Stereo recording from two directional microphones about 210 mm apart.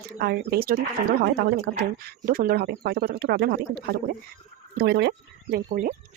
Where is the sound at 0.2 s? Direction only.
45° right (ahead or behind).